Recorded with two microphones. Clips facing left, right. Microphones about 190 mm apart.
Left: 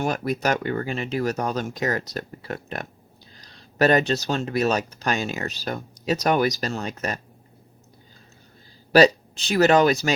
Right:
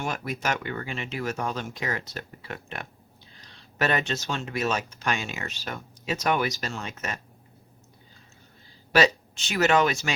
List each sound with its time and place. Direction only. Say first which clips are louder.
0.0 s speech: left 6 dB; 40° left (ahead or behind)
8.9 s speech: left 6 dB; 35° left (ahead or behind)